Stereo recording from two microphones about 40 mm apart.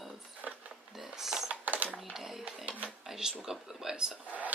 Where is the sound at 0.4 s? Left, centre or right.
Right.